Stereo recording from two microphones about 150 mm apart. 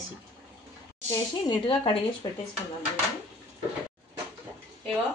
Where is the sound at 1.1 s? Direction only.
30° left (ahead or behind).